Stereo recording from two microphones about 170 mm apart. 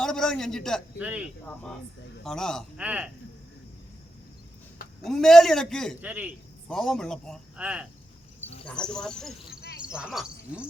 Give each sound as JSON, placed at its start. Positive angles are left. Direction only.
{"t": 0.0, "sound": "a man's voice", "side_deg": 5}
{"t": 0.9, "sound": "a man's voice", "side_deg": -10}
{"t": 2.2, "sound": "a man's voice", "side_deg": 5}
{"t": 2.7, "sound": "a man's voice", "side_deg": -5}
{"t": 5.0, "sound": "a man's voice", "side_deg": 0}
{"t": 6.0, "sound": "a man's voice", "side_deg": -10}
{"t": 6.7, "sound": "a man's voice", "side_deg": 5}
{"t": 7.6, "sound": "a man's voice", "side_deg": -5}
{"t": 8.6, "sound": "a man's voice", "side_deg": 5}